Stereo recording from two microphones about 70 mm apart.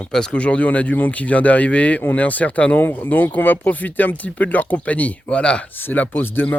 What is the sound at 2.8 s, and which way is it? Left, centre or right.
A man's voice, left.